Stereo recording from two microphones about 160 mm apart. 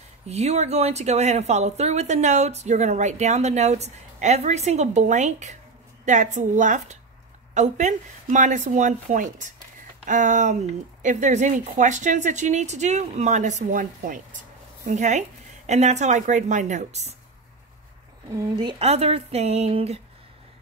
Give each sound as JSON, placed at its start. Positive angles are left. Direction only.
{"t": 0.3, "sound": "speech", "side_deg": -40}
{"t": 18.3, "sound": "speech", "side_deg": -30}